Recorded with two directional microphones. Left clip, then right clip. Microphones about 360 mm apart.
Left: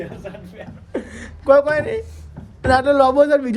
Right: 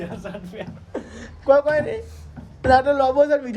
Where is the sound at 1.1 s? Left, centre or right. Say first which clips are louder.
Left 3 dB; centre.